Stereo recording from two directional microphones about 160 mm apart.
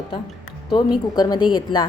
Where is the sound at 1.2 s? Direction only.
25° left (ahead or behind).